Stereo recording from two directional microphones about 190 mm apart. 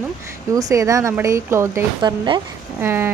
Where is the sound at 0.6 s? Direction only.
15° right (ahead or behind).